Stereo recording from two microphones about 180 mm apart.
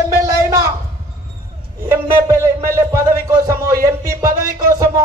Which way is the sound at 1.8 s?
15° right (ahead or behind).